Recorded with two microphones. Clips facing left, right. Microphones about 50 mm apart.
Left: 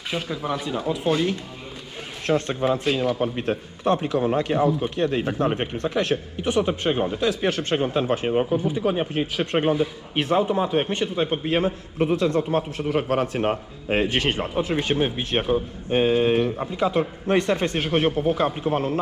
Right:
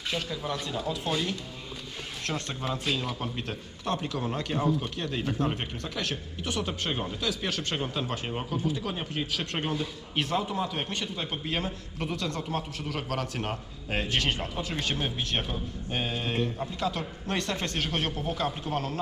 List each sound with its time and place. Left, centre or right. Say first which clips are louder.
0.1 s speech: left 6 dB; centre
2.2 s speech: left 12 dB; left